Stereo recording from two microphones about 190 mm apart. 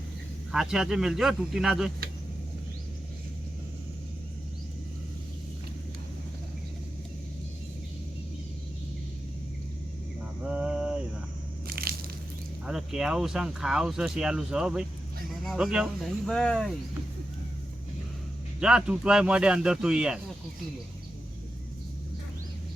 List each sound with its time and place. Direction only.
0.5 s speech: centre (ahead or behind)
10.4 s a sound: 5° right (ahead or behind)
11.7 s crushing: 50° right (ahead or behind)
12.6 s speech: 5° right (ahead or behind)
18.6 s speech: 5° right (ahead or behind)